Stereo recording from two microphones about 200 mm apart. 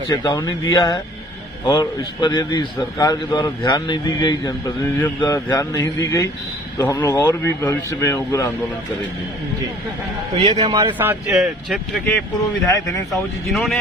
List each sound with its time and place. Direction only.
0.1 s a man's voice: 20° left (ahead or behind)
10.3 s a man's voice: 30° right (ahead or behind)
11.0 s speech: 5° right (ahead or behind)
12.6 s a man's voice: 15° left (ahead or behind)
13.1 s speech: centre (ahead or behind)